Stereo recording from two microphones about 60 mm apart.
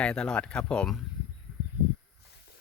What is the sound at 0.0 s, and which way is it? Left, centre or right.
Speech, centre.